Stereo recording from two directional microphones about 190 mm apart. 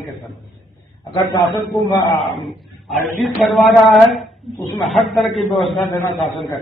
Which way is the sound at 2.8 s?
Centre (ahead or behind).